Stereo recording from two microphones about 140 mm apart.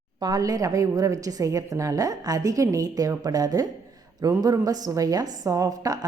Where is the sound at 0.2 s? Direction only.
25° right (ahead or behind).